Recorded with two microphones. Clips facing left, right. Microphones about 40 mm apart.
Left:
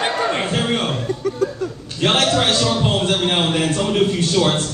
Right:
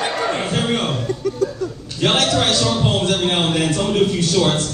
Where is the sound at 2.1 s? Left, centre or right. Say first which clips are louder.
Left 1 dB; centre.